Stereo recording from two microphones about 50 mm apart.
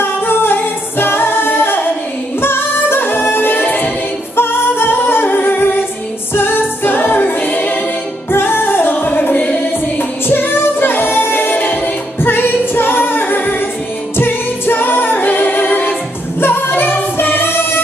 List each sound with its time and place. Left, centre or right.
0.0 s a capella: left
2.4 s music: left
4.4 s music: left
8.3 s music: left
9.7 s music: left
16.3 s singing: left